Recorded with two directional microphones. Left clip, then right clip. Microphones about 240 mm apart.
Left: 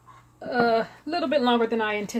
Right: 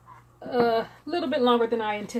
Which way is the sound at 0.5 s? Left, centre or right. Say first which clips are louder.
Left 1 dB; left.